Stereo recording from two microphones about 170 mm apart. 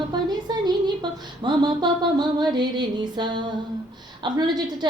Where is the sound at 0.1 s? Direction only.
25° right (ahead or behind).